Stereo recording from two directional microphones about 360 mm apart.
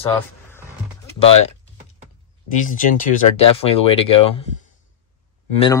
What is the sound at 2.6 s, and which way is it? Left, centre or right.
Speech, left.